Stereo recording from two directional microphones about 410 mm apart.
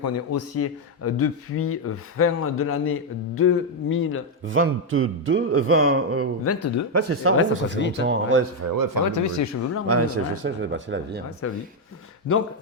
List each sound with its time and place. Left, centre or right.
0.0 s speech: left
4.4 s a man's voice: right
6.4 s speech: left
6.9 s speech: right
7.3 s speech: left
8.0 s a man's voice: right
9.0 s speech: left
9.8 s a man's voice: right